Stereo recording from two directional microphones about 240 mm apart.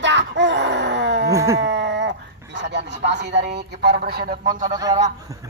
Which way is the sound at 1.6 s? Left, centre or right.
Right.